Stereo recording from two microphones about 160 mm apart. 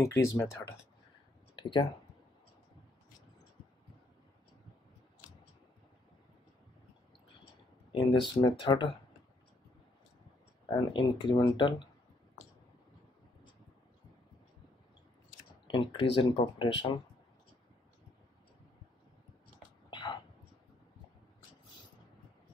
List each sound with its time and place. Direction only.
0.2 s speech: 20° left (ahead or behind)
1.5 s speech: 30° left (ahead or behind)
7.9 s speech: 30° left (ahead or behind)
10.7 s speech: 25° left (ahead or behind)
15.6 s speech: 30° left (ahead or behind)
19.9 s whispering: 30° left (ahead or behind)